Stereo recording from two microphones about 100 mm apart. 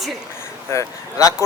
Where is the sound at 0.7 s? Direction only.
35° left (ahead or behind).